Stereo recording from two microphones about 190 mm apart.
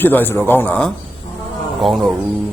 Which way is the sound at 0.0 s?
10° left (ahead or behind).